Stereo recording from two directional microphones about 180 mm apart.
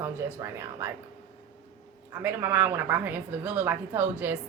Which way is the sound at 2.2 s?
10° right (ahead or behind).